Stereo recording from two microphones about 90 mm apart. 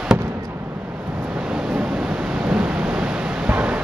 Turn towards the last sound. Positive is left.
turn(degrees=-15)  # may be behind; listen again after turning